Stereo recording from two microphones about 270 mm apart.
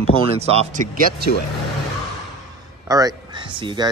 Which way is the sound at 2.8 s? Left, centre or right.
Centre.